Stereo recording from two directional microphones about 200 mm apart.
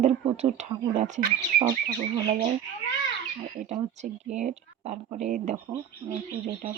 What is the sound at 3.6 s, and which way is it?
Speech, 35° right (ahead or behind).